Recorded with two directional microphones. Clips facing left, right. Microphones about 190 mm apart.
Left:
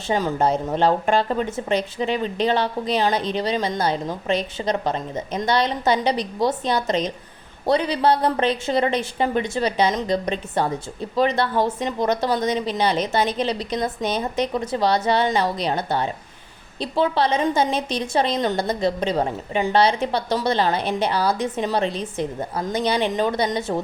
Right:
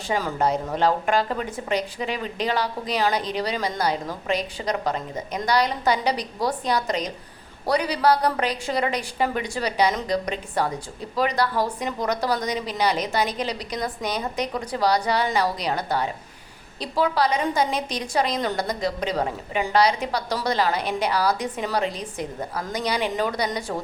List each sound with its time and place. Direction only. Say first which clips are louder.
0.1 s a woman's voice: left 3 dB; 25° left (ahead or behind)